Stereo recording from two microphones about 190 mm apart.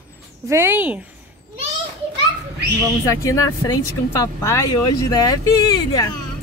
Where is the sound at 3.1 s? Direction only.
15° left (ahead or behind).